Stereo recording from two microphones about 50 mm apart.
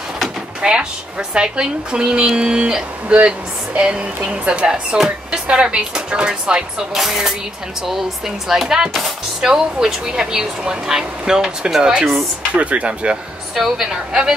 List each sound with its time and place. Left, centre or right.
0.6 s speech: centre
8.5 s speech: centre
12.5 s speech: right